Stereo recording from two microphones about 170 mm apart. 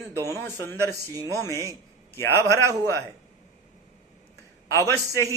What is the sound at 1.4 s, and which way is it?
Speech, 20° left (ahead or behind).